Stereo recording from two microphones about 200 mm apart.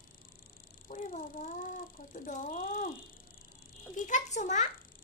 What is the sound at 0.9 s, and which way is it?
Speech, 40° left (ahead or behind).